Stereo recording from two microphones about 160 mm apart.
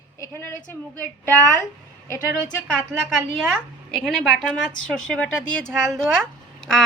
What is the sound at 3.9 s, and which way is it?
A woman's voice, centre (ahead or behind).